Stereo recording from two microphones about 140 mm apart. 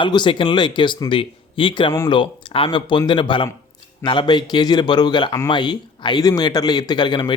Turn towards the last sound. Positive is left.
turn(degrees=35)  # may be behind; listen again after turning